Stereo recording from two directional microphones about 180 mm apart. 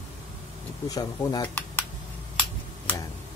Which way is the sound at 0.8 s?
20° left (ahead or behind).